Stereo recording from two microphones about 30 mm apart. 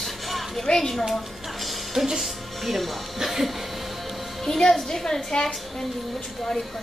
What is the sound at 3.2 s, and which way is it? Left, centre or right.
Music, centre.